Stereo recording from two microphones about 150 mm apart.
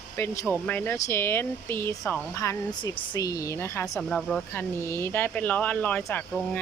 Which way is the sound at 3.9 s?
5° left (ahead or behind).